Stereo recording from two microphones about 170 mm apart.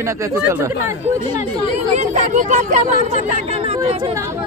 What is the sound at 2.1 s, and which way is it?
Speech, 45° right (ahead or behind).